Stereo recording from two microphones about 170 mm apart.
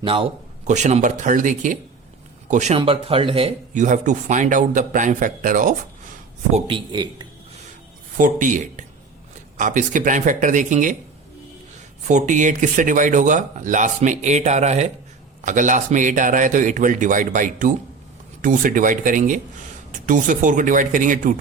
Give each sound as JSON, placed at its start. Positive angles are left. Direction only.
{"t": 0.0, "sound": "speech", "side_deg": -30}
{"t": 0.6, "sound": "speech", "side_deg": -45}
{"t": 2.7, "sound": "speech", "side_deg": -35}
{"t": 3.8, "sound": "speech", "side_deg": -45}
{"t": 6.5, "sound": "speech", "side_deg": -30}
{"t": 8.2, "sound": "speech", "side_deg": -50}
{"t": 12.0, "sound": "speech", "side_deg": -45}